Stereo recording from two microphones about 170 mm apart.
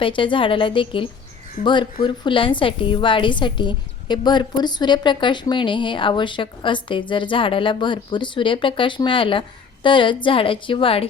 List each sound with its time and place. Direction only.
0.0 s a woman's voice: 30° left (ahead or behind)